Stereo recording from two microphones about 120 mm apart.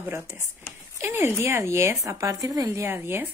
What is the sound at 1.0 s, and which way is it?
Speech, 20° right (ahead or behind).